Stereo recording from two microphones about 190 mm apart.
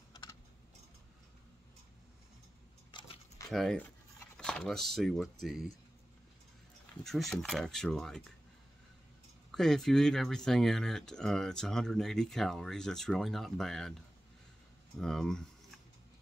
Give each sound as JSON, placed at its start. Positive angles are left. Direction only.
{"t": 2.9, "sound": "a sound", "side_deg": 25}
{"t": 3.4, "sound": "speech", "side_deg": 5}
{"t": 7.0, "sound": "speech", "side_deg": 0}
{"t": 9.5, "sound": "speech", "side_deg": 0}
{"t": 15.0, "sound": "speech", "side_deg": 0}